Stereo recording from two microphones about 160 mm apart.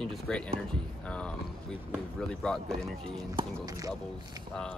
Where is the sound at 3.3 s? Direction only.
25° right (ahead or behind).